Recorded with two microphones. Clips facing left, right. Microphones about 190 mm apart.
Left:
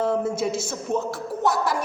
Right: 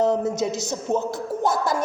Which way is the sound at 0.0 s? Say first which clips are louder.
Right 2 dB; 20° right (ahead or behind).